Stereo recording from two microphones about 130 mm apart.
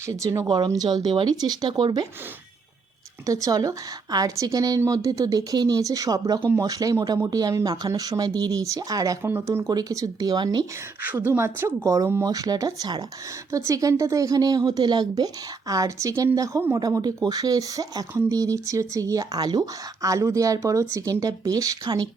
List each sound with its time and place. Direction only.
0.0 s a woman's voice: 25° right (ahead or behind)
0.4 s speech: 35° right (ahead or behind)
3.2 s a woman's voice: 25° right (ahead or behind)
11.0 s a woman's voice: 15° right (ahead or behind); by 22.1 s 30° right (ahead or behind)